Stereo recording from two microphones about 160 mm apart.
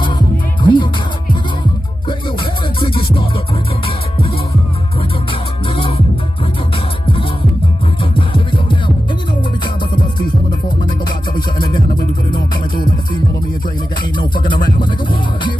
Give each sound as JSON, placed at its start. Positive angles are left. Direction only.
{"t": 0.0, "sound": "music", "side_deg": 30}
{"t": 2.8, "sound": "music", "side_deg": 30}
{"t": 8.0, "sound": "music", "side_deg": 35}
{"t": 11.3, "sound": "music", "side_deg": 30}
{"t": 14.1, "sound": "music", "side_deg": 30}